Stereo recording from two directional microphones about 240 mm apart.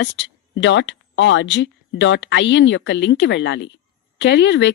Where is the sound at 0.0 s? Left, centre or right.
Left.